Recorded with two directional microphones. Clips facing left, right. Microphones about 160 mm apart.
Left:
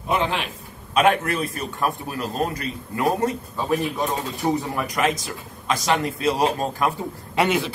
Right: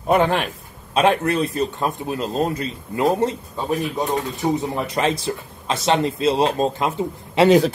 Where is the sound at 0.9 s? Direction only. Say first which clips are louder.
Right 2 dB; 30° right (ahead or behind).